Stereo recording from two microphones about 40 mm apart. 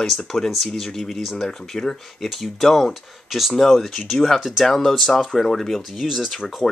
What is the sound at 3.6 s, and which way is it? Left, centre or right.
Speech, centre.